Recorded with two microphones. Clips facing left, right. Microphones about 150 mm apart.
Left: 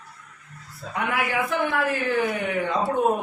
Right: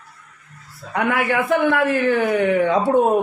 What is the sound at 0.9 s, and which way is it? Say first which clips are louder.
A man's voice: right 6 dB; 70° right (ahead or behind).